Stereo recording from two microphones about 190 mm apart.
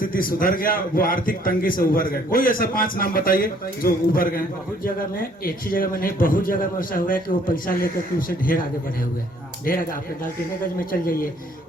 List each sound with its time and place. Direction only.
0.0 s a man's voice: 50° left (ahead or behind)